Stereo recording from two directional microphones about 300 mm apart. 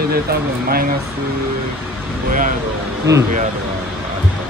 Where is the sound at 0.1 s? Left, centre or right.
Right.